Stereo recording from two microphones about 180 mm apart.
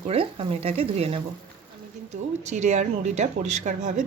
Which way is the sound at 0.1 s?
35° right (ahead or behind).